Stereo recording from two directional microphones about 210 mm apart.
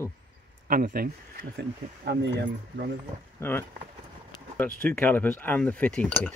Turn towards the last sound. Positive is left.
turn(degrees=5)  # may be behind; listen again after turning